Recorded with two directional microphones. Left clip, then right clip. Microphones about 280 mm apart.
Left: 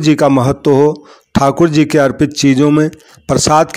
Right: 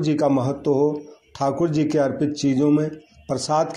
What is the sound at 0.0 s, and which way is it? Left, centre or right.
A man's voice, left.